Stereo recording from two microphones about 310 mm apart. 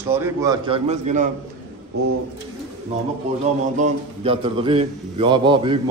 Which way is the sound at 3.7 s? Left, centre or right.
Right.